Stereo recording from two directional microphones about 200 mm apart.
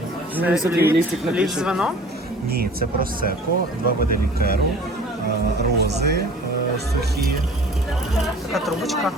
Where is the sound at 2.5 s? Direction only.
50° right (ahead or behind).